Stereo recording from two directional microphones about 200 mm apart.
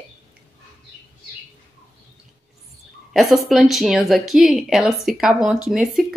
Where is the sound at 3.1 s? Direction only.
Centre (ahead or behind).